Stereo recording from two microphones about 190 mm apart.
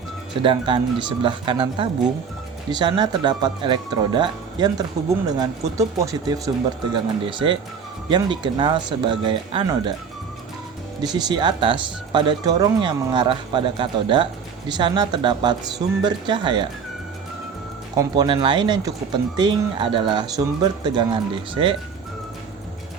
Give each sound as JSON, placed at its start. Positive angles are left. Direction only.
{"t": 0.4, "sound": "speech", "side_deg": -25}
{"t": 11.0, "sound": "speech", "side_deg": -20}
{"t": 17.9, "sound": "speech", "side_deg": -20}